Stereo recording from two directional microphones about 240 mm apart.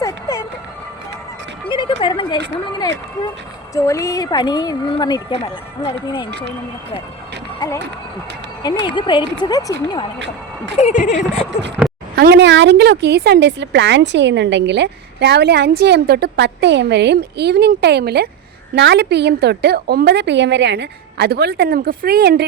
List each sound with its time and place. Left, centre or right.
0.0 s music: centre
1.7 s speech: left
3.8 s speech: centre
8.8 s speech: centre
10.8 s speech: left
11.8 s a sound: centre
12.1 s speech: right